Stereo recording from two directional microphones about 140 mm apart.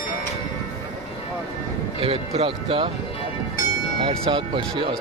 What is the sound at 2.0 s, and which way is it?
Speech, 45° right (ahead or behind).